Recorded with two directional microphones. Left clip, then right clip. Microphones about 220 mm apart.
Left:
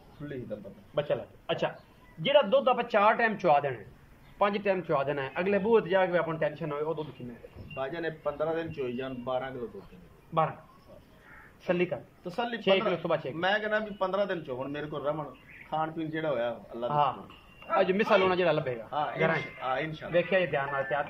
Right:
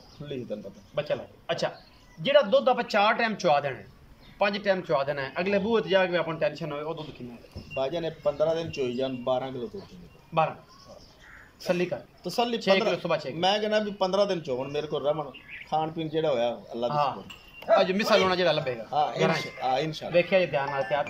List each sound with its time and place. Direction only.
0.2 s a man's voice: 10° right (ahead or behind)
0.9 s a man's voice: 5° left (ahead or behind)
7.7 s a man's voice: 15° right (ahead or behind)
10.3 s a man's voice: centre (ahead or behind)
11.6 s a man's voice: 5° left (ahead or behind)
12.3 s a man's voice: 10° right (ahead or behind)
12.9 s a man's voice: 5° left (ahead or behind)
13.4 s a man's voice: 10° right (ahead or behind)
17.7 s a man's voice: 5° left (ahead or behind)
18.9 s a man's voice: 15° right (ahead or behind)
20.1 s a man's voice: centre (ahead or behind)